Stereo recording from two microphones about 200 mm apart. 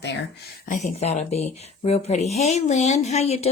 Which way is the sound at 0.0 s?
55° left (ahead or behind).